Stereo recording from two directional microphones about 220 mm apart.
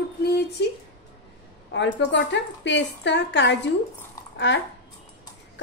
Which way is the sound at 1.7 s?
55° left (ahead or behind).